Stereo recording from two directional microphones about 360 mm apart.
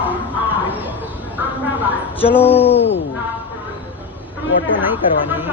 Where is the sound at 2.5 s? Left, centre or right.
Centre.